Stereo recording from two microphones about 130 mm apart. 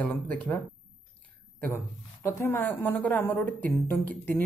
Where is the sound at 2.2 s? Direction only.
20° left (ahead or behind).